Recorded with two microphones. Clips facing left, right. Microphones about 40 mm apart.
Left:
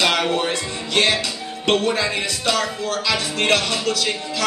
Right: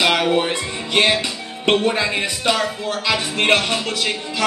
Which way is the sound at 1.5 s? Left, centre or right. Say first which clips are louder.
Right 2 dB; right.